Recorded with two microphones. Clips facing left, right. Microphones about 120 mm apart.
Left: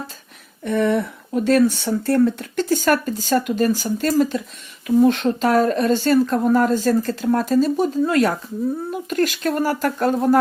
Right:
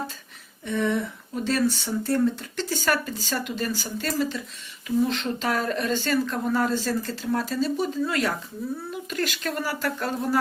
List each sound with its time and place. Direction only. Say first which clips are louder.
0.6 s speech: left 6 dB; 60° left (ahead or behind)